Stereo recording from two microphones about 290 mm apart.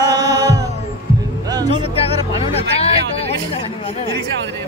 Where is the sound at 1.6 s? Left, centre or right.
Centre.